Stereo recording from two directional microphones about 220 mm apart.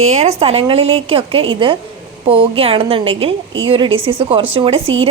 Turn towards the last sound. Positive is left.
turn(degrees=-25)  # may be behind; listen again after turning